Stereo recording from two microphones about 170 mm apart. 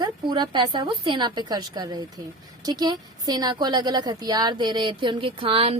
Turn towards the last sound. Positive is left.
turn(degrees=-35)  # may be behind; listen again after turning